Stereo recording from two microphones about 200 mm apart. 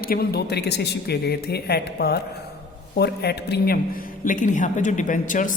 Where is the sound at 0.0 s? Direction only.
50° left (ahead or behind).